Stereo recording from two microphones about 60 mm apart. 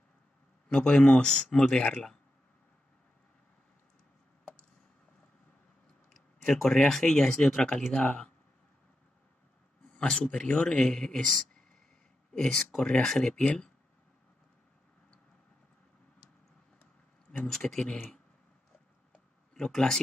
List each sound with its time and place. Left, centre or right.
0.7 s speech: centre
6.1 s speech: centre
9.9 s speech: centre
12.4 s speech: centre
17.3 s speech: centre
19.5 s speech: centre